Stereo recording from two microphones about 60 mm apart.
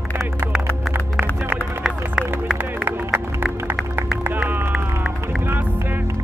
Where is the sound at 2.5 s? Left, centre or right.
Right.